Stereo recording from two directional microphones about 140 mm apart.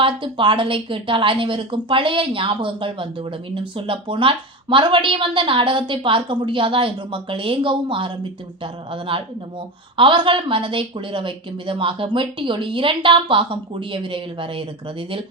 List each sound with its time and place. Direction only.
0.0 s a woman's voice: 35° right (ahead or behind)